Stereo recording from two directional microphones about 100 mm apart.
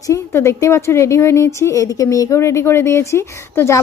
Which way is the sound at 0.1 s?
30° left (ahead or behind).